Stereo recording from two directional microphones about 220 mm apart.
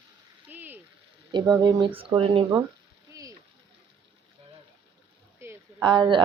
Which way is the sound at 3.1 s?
15° right (ahead or behind).